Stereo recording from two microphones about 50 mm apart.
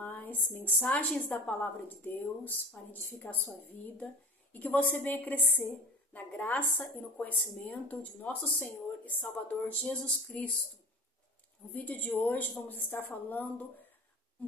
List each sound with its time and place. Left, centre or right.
0.0 s a woman's voice: left
9.8 s a sound: centre
11.7 s a woman's voice: left